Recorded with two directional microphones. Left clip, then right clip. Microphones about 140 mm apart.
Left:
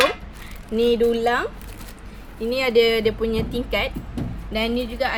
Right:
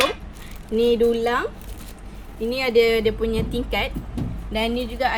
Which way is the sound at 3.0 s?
30° right (ahead or behind).